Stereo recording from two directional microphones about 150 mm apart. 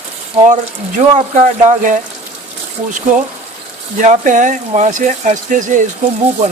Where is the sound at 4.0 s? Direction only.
55° right (ahead or behind).